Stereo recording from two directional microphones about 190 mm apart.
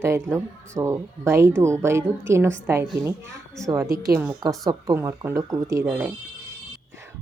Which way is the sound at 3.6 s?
15° right (ahead or behind).